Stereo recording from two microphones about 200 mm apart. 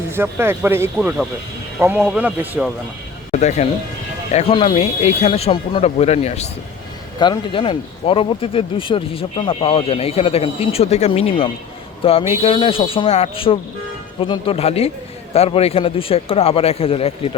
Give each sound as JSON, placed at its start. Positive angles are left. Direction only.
{"t": 0.1, "sound": "speech", "side_deg": -10}
{"t": 3.3, "sound": "speech", "side_deg": 35}